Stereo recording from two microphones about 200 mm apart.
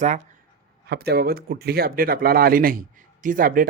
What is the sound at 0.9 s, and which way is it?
Speech, 50° right (ahead or behind).